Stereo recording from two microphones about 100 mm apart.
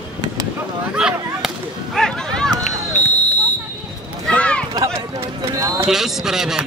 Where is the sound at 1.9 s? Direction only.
5° left (ahead or behind).